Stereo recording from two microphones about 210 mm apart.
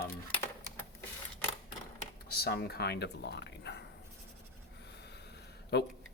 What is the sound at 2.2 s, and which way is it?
Speech, 50° left (ahead or behind).